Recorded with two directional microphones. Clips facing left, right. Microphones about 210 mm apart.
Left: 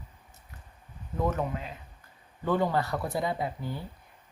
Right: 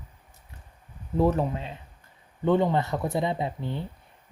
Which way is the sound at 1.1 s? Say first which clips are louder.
Right 6 dB; 30° right (ahead or behind).